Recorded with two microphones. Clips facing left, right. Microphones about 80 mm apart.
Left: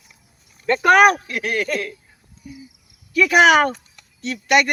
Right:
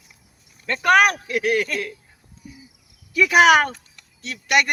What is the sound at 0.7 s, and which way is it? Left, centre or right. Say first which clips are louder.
Speech: left 4 dB; centre.